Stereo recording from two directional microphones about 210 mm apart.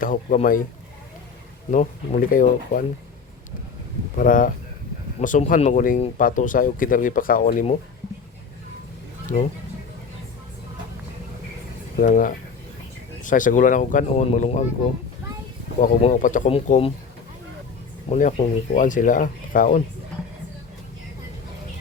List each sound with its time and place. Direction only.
0.0 s speech: 40° left (ahead or behind)
1.7 s speech: 40° left (ahead or behind)
4.2 s speech: 40° left (ahead or behind)
9.2 s speech: 35° left (ahead or behind)
11.9 s speech: 40° left (ahead or behind)
15.8 s speech: 35° left (ahead or behind)
18.1 s speech: 35° left (ahead or behind)